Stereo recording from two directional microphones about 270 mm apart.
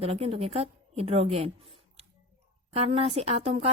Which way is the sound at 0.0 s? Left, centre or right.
Right.